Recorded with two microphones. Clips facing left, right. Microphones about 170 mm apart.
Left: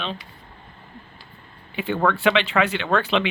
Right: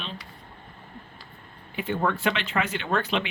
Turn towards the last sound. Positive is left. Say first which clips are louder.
# left 5 dB
turn(degrees=85)